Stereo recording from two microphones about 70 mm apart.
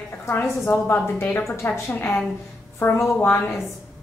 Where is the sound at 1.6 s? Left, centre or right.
Left.